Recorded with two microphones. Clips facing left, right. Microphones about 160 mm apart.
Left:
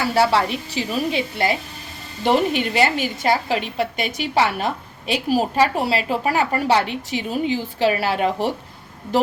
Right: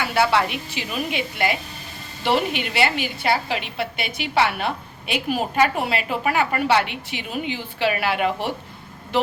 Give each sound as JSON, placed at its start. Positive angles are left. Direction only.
{"t": 0.0, "sound": "a woman's voice", "side_deg": 35}